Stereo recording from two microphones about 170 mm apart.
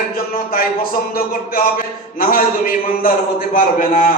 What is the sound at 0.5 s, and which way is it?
A man's voice, 60° left (ahead or behind).